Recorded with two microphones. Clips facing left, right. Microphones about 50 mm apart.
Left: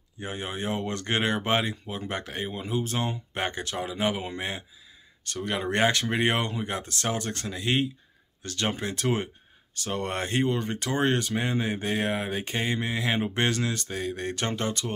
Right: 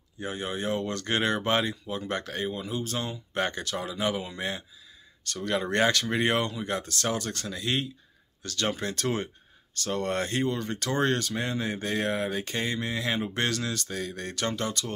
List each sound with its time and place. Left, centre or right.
0.2 s speech: left